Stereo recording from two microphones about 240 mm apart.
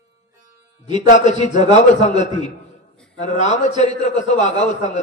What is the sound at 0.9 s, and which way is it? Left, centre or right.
A man's voice, left.